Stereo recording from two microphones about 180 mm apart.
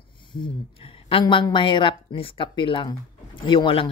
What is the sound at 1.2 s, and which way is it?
Speech, 25° left (ahead or behind).